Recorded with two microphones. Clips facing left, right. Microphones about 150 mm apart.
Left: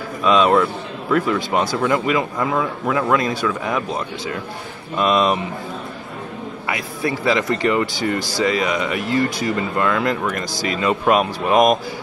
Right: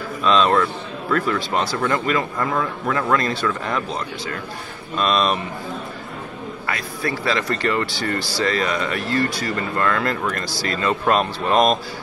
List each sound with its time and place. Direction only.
0.2 s speech: 15° left (ahead or behind)
6.7 s speech: 20° left (ahead or behind)